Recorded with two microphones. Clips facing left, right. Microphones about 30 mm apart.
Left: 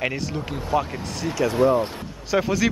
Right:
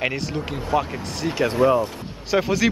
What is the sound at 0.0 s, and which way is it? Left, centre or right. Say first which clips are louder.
Speech: right 1 dB; centre.